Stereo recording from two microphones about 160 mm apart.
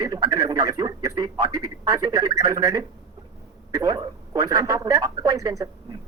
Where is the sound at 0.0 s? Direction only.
20° right (ahead or behind).